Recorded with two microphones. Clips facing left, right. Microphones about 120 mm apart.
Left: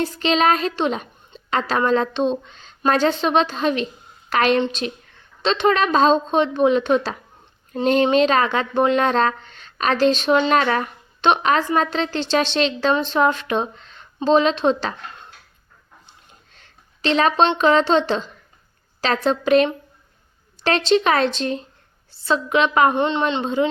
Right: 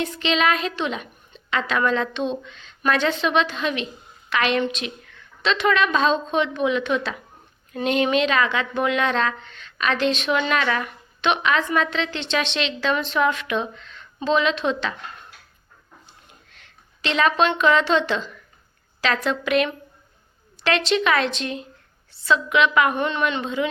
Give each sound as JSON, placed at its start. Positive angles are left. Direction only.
{"t": 0.0, "sound": "speech", "side_deg": 35}
{"t": 16.5, "sound": "speech", "side_deg": 35}
{"t": 23.0, "sound": "a woman's voice", "side_deg": 25}